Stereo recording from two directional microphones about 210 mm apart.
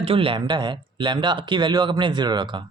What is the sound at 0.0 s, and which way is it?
Speech, 25° right (ahead or behind).